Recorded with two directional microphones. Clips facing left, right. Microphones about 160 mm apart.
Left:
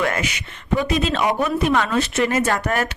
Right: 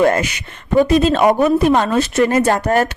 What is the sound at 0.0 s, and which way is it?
A woman's voice, 40° right (ahead or behind).